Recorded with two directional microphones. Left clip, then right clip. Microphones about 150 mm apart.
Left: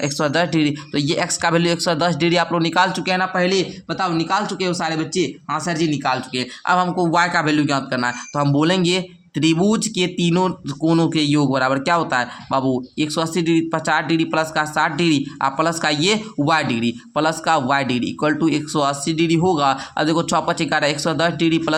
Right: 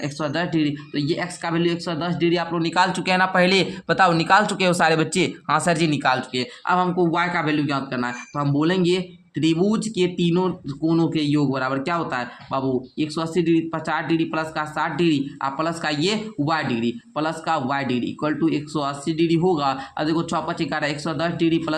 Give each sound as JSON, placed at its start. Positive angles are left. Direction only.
{"t": 0.0, "sound": "speech", "side_deg": 40}
{"t": 2.9, "sound": "speech", "side_deg": 0}
{"t": 3.3, "sound": "speech", "side_deg": -20}
{"t": 3.8, "sound": "speech", "side_deg": -40}
{"t": 6.0, "sound": "speech", "side_deg": -5}
{"t": 6.7, "sound": "speech", "side_deg": 35}